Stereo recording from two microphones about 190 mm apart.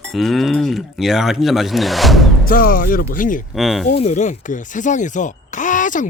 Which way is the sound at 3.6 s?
Centre (ahead or behind).